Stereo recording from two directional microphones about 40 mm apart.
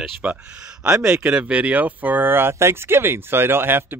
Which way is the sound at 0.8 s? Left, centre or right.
Right.